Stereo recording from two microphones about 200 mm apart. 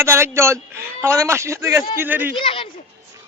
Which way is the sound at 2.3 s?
25° left (ahead or behind).